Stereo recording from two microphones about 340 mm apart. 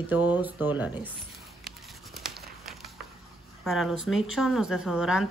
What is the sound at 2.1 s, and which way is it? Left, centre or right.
Crumpling, centre.